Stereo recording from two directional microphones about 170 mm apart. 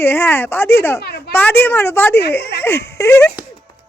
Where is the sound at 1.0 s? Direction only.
65° left (ahead or behind).